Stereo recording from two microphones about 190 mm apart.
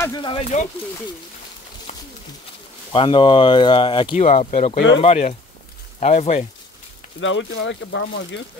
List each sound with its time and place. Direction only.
0.0 s speech: 20° left (ahead or behind)
2.9 s speech: 25° left (ahead or behind)
7.2 s speech: 85° left